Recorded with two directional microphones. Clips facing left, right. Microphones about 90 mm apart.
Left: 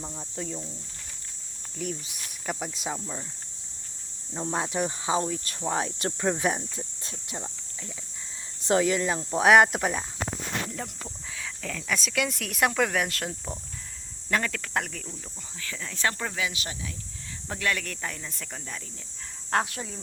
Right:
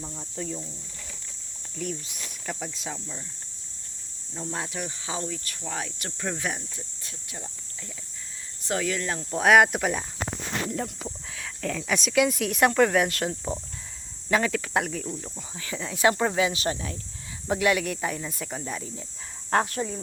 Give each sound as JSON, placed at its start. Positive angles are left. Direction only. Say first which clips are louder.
{"t": 0.0, "sound": "speech", "louder": "even", "side_deg": 15}
{"t": 0.3, "sound": "speech", "louder": "right 2 dB", "side_deg": 5}
{"t": 1.7, "sound": "speech", "louder": "right 1 dB", "side_deg": 0}
{"t": 4.5, "sound": "speech", "louder": "left 6 dB", "side_deg": 25}
{"t": 8.6, "sound": "speech", "louder": "left 5 dB", "side_deg": 20}
{"t": 9.6, "sound": "speech", "louder": "even", "side_deg": 0}
{"t": 15.6, "sound": "speech", "louder": "right 7 dB", "side_deg": -20}
{"t": 16.2, "sound": "speech", "louder": "right 8 dB", "side_deg": -30}
{"t": 17.5, "sound": "speech", "louder": "right 7 dB", "side_deg": -15}
{"t": 19.5, "sound": "speech", "louder": "right 3 dB", "side_deg": 0}